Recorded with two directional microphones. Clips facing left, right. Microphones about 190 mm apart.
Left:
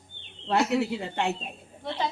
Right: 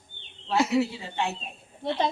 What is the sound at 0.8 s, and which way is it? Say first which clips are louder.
Speech: left 2 dB; 60° left (ahead or behind).